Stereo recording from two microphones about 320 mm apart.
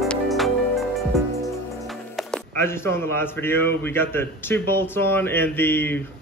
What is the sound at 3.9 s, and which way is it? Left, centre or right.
A man's voice, centre.